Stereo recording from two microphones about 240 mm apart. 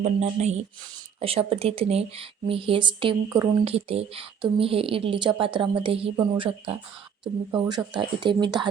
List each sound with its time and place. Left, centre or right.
0.0 s speech: right
7.9 s speech: centre